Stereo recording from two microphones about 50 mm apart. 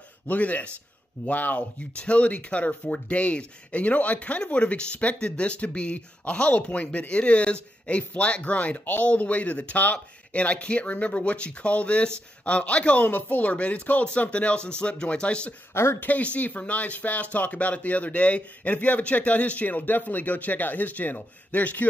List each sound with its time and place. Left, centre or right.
0.3 s speech: left
15.7 s speech: left
16.0 s speech: left